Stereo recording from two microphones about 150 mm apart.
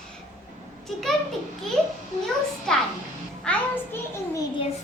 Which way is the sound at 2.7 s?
5° left (ahead or behind).